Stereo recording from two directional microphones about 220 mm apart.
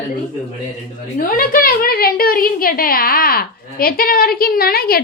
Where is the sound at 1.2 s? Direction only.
40° left (ahead or behind).